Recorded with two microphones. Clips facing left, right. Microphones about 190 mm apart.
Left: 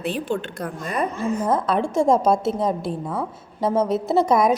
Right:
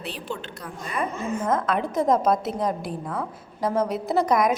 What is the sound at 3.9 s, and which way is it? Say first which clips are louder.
Speech: left 4 dB; 25° left (ahead or behind).